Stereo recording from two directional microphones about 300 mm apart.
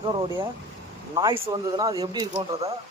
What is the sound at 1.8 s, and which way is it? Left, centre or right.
Speech, centre.